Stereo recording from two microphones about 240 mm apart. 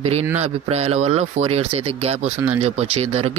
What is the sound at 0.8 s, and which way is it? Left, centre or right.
Speech, right.